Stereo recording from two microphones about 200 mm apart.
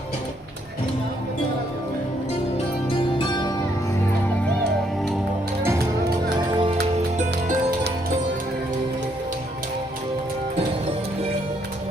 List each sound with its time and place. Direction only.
3.2 s music: 20° left (ahead or behind)
6.3 s music: 20° right (ahead or behind)
7.2 s music: 35° right (ahead or behind)